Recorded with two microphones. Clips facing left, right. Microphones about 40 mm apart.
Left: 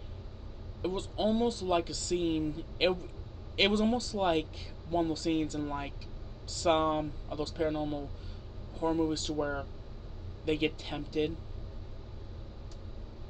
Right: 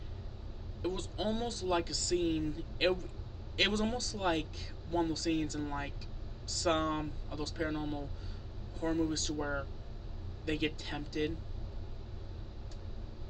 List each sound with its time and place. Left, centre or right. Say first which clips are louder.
0.8 s speech: left 4 dB; centre
9.4 s speech: left 4 dB; centre
10.4 s speech: left 4 dB; left